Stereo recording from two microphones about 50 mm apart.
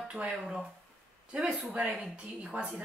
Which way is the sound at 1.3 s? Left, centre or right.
Centre.